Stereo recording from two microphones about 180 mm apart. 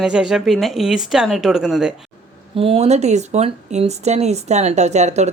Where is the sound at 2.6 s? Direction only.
30° right (ahead or behind).